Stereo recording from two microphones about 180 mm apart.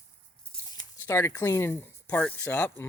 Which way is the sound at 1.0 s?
15° left (ahead or behind).